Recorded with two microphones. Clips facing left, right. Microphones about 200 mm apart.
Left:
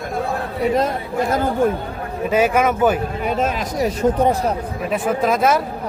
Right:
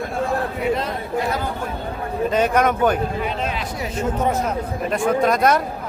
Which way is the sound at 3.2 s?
45° left (ahead or behind).